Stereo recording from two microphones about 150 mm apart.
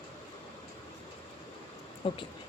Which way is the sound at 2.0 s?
35° left (ahead or behind).